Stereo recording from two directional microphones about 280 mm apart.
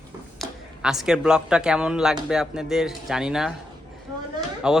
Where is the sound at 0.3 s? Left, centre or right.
Centre.